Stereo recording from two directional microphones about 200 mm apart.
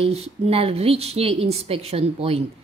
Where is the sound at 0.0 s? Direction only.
30° right (ahead or behind).